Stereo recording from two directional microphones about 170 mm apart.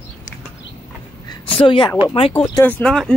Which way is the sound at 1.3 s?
30° left (ahead or behind).